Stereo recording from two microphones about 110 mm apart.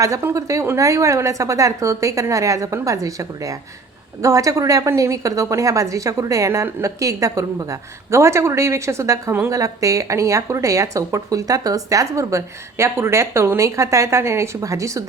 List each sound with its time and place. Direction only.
0.0 s a woman's voice: 25° right (ahead or behind)